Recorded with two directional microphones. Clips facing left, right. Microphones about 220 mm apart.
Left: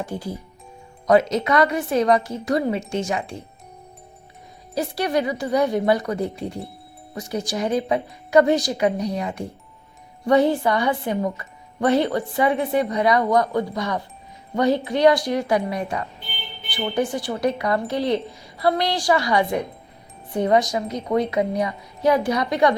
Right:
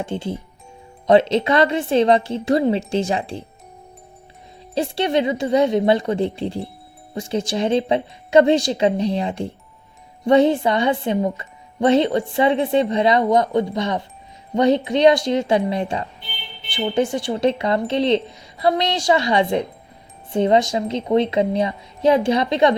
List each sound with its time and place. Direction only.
0.0 s a woman's voice: 25° right (ahead or behind)
4.7 s a woman's voice: 25° right (ahead or behind)